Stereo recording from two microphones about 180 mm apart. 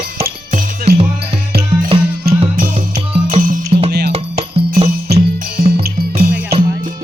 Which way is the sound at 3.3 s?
45° right (ahead or behind).